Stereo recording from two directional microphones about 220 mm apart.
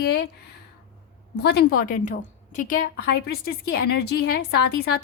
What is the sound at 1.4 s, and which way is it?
A woman's voice, 45° left (ahead or behind).